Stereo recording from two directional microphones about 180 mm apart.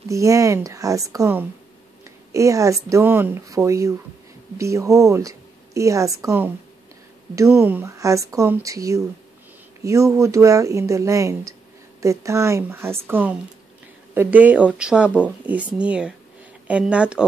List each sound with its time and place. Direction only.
0.1 s speech: 15° right (ahead or behind)
7.5 s speech: 10° right (ahead or behind)